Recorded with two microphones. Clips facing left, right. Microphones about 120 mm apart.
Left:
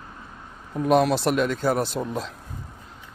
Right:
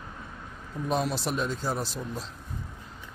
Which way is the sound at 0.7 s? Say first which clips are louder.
Left 9 dB; 70° left (ahead or behind).